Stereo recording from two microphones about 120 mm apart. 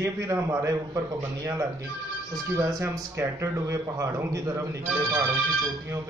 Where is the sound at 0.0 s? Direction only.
25° right (ahead or behind).